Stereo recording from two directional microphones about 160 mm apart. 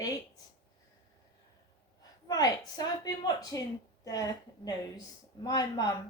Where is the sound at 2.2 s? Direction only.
25° left (ahead or behind).